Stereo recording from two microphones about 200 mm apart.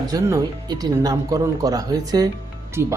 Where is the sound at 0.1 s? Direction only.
20° right (ahead or behind).